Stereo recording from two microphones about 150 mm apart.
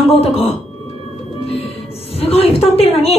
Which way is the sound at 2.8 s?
40° left (ahead or behind).